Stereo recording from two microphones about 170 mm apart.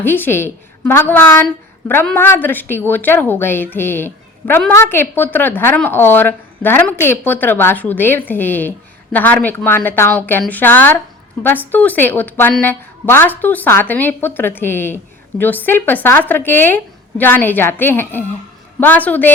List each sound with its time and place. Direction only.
0.0 s a woman's voice: 10° left (ahead or behind)